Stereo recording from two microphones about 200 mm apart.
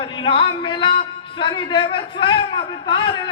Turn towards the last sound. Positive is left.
turn(degrees=25)  # may be behind; listen again after turning